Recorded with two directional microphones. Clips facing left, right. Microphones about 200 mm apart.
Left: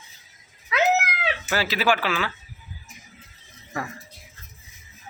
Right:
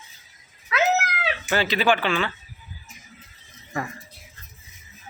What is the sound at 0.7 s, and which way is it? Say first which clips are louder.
Cat: left 1 dB; 15° left (ahead or behind).